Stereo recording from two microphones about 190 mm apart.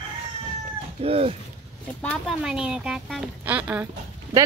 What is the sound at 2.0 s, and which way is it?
Speech, 5° left (ahead or behind).